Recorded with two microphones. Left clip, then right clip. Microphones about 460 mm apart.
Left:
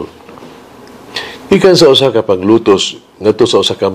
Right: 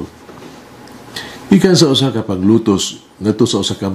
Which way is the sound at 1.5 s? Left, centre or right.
Left.